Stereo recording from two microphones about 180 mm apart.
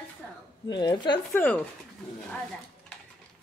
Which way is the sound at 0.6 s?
25° left (ahead or behind).